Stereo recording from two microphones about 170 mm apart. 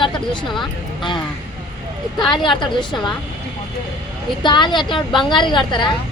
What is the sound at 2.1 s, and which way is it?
Speech, 25° left (ahead or behind).